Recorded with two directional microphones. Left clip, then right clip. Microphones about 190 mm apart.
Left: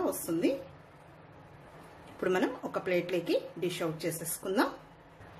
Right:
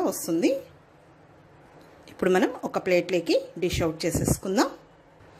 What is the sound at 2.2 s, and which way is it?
A woman's voice, 45° right (ahead or behind).